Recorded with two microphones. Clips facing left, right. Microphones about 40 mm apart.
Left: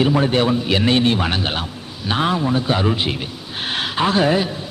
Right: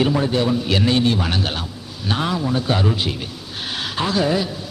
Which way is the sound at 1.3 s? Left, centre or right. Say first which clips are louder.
Left 2 dB; left.